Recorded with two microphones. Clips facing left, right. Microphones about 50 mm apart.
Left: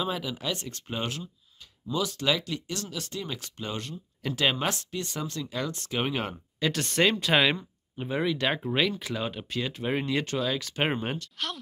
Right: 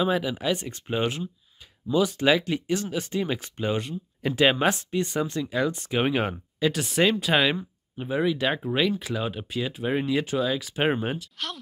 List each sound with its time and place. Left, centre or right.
0.0 s speech: centre